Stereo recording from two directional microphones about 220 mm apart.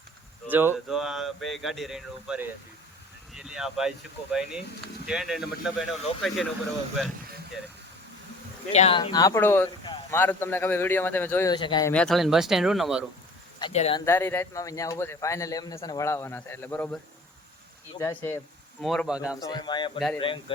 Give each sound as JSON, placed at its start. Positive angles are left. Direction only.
{"t": 0.5, "sound": "speech", "side_deg": -10}
{"t": 8.7, "sound": "a man's voice", "side_deg": 30}
{"t": 10.2, "sound": "a man's voice", "side_deg": 10}
{"t": 11.9, "sound": "speech", "side_deg": 0}
{"t": 13.6, "sound": "speech", "side_deg": 25}
{"t": 14.0, "sound": "a man's voice", "side_deg": 10}
{"t": 19.4, "sound": "speech", "side_deg": 20}